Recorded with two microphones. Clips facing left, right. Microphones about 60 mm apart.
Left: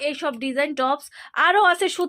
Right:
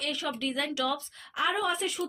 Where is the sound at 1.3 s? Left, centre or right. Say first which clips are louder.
Left 12 dB; left.